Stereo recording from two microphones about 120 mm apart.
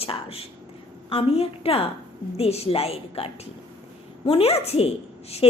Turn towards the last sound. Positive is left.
turn(degrees=55)  # may be behind; listen again after turning